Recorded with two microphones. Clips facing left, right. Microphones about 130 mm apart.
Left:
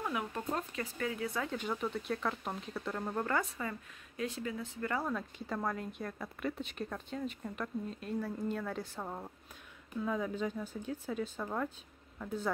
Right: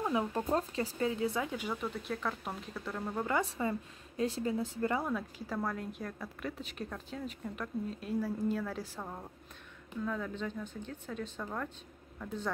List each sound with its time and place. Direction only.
0.0 s speech: 30° right (ahead or behind)
1.4 s speech: 10° right (ahead or behind)
3.4 s speech: 25° right (ahead or behind)
5.0 s speech: 5° right (ahead or behind)
10.0 s speech: 10° left (ahead or behind)